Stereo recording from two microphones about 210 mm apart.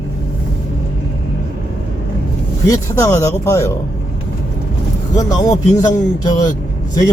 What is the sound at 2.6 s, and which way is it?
A man's voice, 15° left (ahead or behind).